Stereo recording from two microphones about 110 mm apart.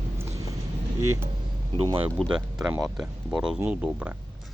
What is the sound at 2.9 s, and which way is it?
Speech, 5° right (ahead or behind).